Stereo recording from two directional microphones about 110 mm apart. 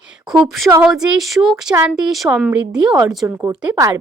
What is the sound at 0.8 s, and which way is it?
Speech, 5° right (ahead or behind).